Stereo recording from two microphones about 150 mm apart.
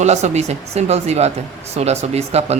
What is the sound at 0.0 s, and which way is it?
A woman's voice, 50° right (ahead or behind).